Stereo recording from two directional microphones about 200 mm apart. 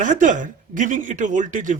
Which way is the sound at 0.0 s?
40° right (ahead or behind).